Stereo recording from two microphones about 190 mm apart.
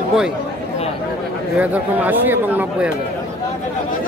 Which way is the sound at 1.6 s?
10° right (ahead or behind).